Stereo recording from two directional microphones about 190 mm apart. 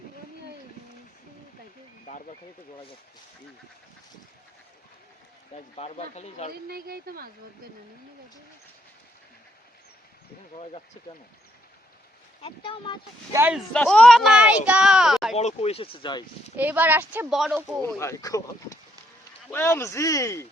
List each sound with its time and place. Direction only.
5.5 s speech: 35° left (ahead or behind)
6.5 s a woman's voice: 55° right (ahead or behind)
10.5 s speech: 30° left (ahead or behind)
12.4 s speech: 25° left (ahead or behind)
13.3 s speech: 10° right (ahead or behind)
13.7 s speech: 5° left (ahead or behind)
15.4 s speech: 35° left (ahead or behind)
16.6 s speech: 10° right (ahead or behind)
17.8 s speech: 15° left (ahead or behind)